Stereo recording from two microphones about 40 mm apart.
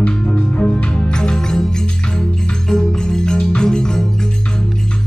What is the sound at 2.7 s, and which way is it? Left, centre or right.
Music, centre.